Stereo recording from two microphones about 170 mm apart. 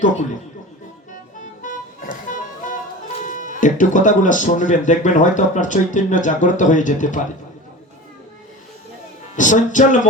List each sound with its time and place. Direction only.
1.1 s music: 50° left (ahead or behind)
3.2 s speech: 50° left (ahead or behind)
9.3 s speech: 50° left (ahead or behind)